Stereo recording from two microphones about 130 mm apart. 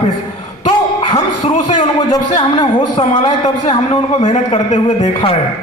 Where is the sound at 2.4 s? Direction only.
40° left (ahead or behind).